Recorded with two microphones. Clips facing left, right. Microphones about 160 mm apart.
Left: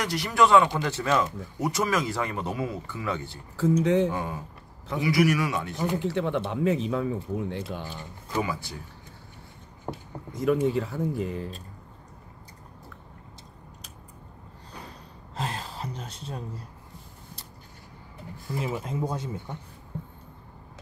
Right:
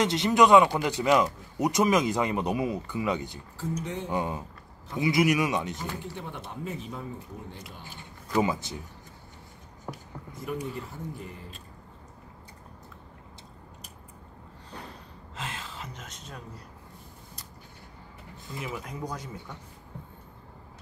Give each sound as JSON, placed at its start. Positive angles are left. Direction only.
{"t": 0.0, "sound": "a man's voice", "side_deg": -20}
{"t": 3.8, "sound": "speech", "side_deg": 90}
{"t": 4.1, "sound": "a man's voice", "side_deg": -20}
{"t": 5.9, "sound": "speech", "side_deg": 90}
{"t": 8.4, "sound": "a man's voice", "side_deg": -20}
{"t": 10.3, "sound": "speech", "side_deg": 90}
{"t": 15.3, "sound": "gasp", "side_deg": 40}
{"t": 18.6, "sound": "speech", "side_deg": 25}